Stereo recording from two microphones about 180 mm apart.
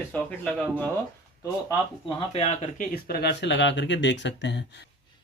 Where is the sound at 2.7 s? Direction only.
50° left (ahead or behind); by 4.6 s 75° left (ahead or behind).